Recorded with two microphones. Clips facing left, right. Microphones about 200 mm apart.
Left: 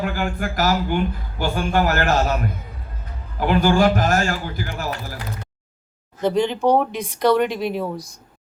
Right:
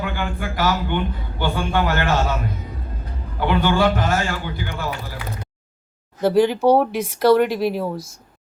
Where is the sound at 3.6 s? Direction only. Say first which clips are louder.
Left 3 dB; 40° left (ahead or behind).